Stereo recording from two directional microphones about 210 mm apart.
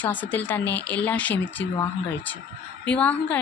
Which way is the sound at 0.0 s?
10° left (ahead or behind).